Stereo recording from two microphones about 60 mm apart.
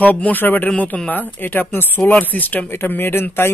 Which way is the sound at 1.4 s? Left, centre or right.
Left.